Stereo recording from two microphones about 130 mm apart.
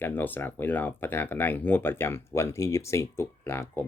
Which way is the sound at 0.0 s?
15° left (ahead or behind).